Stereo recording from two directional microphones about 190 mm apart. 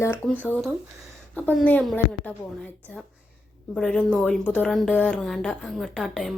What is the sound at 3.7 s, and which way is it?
A woman's voice, 5° left (ahead or behind).